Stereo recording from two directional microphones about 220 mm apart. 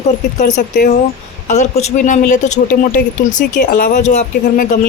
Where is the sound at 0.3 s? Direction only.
35° left (ahead or behind).